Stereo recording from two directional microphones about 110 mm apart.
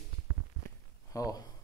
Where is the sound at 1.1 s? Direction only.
30° left (ahead or behind).